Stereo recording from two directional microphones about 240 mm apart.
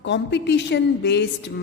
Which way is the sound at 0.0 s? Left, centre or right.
Left.